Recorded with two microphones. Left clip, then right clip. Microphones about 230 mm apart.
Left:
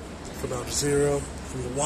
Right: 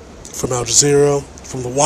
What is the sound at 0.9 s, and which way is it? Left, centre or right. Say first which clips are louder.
Speech: right 9 dB; right.